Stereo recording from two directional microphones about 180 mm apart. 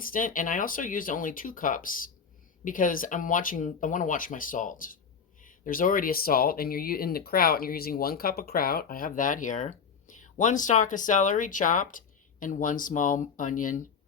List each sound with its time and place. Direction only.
0.0 s speech: 50° left (ahead or behind)